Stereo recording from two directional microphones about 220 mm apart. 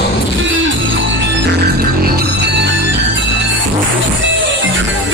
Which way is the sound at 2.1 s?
50° right (ahead or behind).